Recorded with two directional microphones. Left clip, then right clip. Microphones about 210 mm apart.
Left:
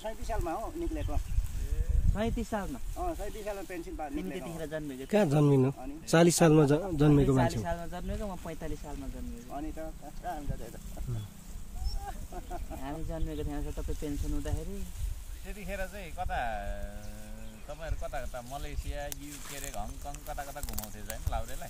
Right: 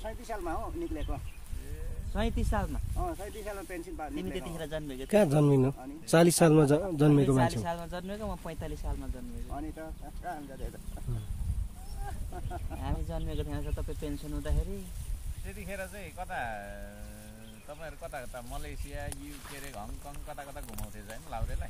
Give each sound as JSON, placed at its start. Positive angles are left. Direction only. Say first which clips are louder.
{"t": 0.0, "sound": "speech", "louder": "left 2 dB", "side_deg": -5}
{"t": 2.1, "sound": "speech", "louder": "even", "side_deg": -35}
{"t": 3.0, "sound": "speech", "louder": "left 1 dB", "side_deg": -10}
{"t": 4.6, "sound": "speech", "louder": "even", "side_deg": -40}
{"t": 5.0, "sound": "speech", "louder": "right 2 dB", "side_deg": -5}
{"t": 7.3, "sound": "speech", "louder": "right 1 dB", "side_deg": -35}
{"t": 9.5, "sound": "speech", "louder": "left 1 dB", "side_deg": -5}
{"t": 12.8, "sound": "speech", "louder": "even", "side_deg": -35}
{"t": 15.4, "sound": "speech", "louder": "left 1 dB", "side_deg": 10}